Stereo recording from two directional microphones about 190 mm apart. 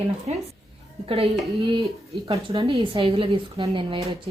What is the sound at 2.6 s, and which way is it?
Speech, 30° right (ahead or behind).